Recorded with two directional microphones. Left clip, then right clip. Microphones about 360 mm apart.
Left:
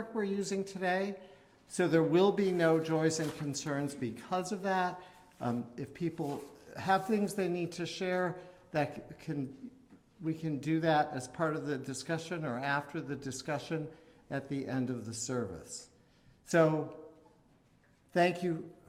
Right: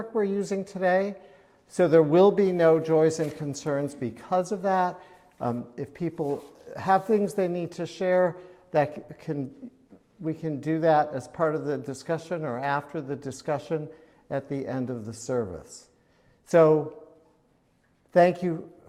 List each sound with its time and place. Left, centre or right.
0.1 s speech: right
18.1 s speech: right